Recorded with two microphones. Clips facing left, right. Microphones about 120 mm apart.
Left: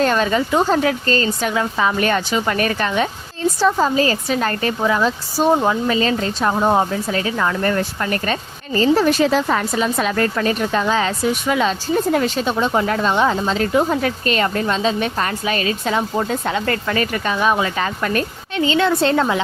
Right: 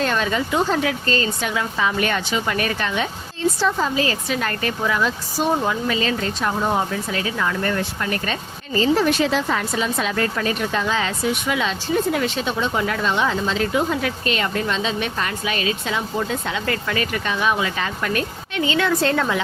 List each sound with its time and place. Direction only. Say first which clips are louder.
0.0 s speech: left 4 dB; 40° left (ahead or behind)